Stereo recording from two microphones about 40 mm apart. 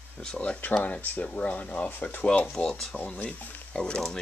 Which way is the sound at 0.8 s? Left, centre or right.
Left.